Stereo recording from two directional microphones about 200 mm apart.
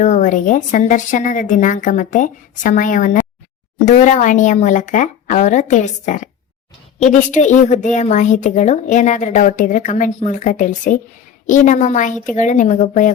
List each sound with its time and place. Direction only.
0.0 s a woman's voice: 40° left (ahead or behind)